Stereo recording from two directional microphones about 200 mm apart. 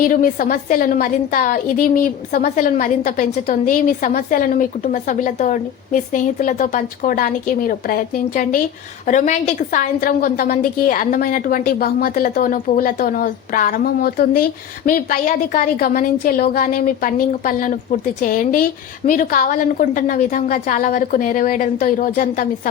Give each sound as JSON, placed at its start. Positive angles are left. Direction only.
{"t": 0.0, "sound": "a woman's voice", "side_deg": 45}